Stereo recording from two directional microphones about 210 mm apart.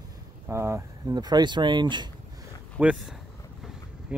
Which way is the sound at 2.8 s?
5° right (ahead or behind).